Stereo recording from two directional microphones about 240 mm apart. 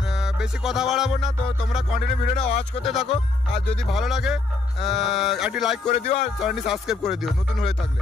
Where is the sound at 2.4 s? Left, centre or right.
Left.